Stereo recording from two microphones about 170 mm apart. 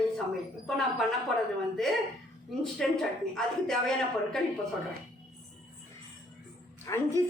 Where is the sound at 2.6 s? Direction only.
Centre (ahead or behind).